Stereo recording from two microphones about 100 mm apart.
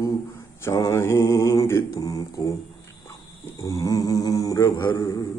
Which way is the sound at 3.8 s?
35° left (ahead or behind).